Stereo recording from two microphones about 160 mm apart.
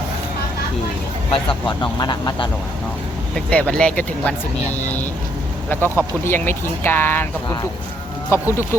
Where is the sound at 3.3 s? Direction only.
5° left (ahead or behind).